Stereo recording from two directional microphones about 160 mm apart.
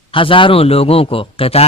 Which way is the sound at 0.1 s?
35° left (ahead or behind).